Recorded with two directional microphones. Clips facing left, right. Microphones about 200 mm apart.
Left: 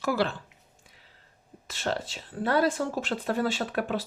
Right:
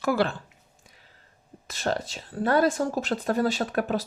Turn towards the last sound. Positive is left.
turn(degrees=-45)  # may be behind; listen again after turning